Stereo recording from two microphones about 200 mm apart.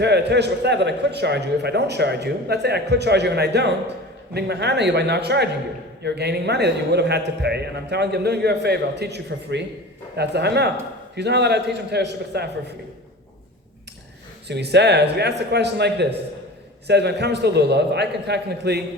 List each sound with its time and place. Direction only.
0.0 s a man's voice: 55° right (ahead or behind)
14.4 s a man's voice: 55° right (ahead or behind)